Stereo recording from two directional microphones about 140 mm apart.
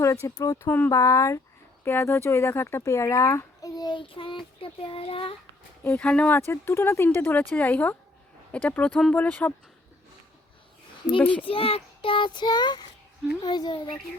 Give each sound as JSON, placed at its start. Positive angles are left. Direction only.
{"t": 0.0, "sound": "a child's voice", "side_deg": 20}
{"t": 5.8, "sound": "speech", "side_deg": 10}
{"t": 11.4, "sound": "a child's voice", "side_deg": 40}